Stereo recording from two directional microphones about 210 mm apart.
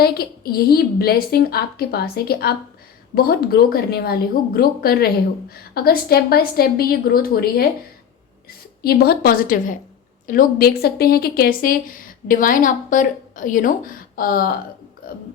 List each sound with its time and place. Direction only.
0.0 s a woman's voice: 45° left (ahead or behind)